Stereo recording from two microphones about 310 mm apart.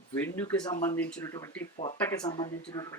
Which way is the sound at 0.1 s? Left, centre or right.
Centre.